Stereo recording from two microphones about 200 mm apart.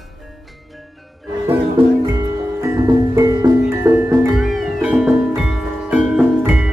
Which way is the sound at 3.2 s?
15° right (ahead or behind).